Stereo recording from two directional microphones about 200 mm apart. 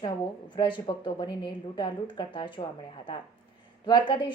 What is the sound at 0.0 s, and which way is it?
Speech, 25° left (ahead or behind).